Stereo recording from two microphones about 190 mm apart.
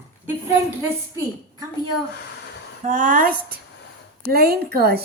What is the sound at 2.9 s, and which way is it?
A woman's voice, 45° right (ahead or behind).